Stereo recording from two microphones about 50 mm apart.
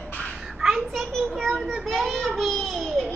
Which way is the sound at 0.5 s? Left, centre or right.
Centre.